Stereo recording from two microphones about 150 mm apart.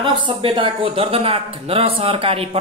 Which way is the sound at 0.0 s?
35° right (ahead or behind).